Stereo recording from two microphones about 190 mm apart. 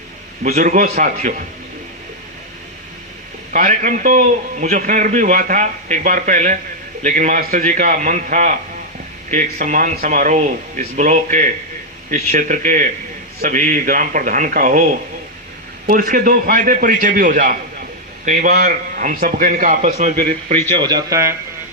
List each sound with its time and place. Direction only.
0.4 s a man's voice: 40° right (ahead or behind)
3.5 s a man's voice: 45° right (ahead or behind)
15.9 s a man's voice: 45° right (ahead or behind)
20.7 s speech: 20° right (ahead or behind)